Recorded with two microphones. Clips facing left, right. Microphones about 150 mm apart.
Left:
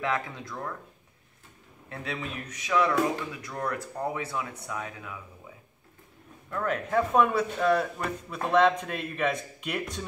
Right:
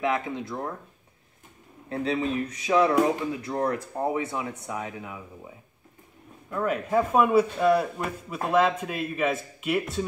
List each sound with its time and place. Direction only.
0.0 s speech: 20° right (ahead or behind)
1.9 s speech: 30° right (ahead or behind)
6.5 s speech: 10° right (ahead or behind)